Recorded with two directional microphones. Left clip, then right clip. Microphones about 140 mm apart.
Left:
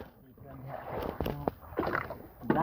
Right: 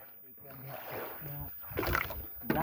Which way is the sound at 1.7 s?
30° right (ahead or behind).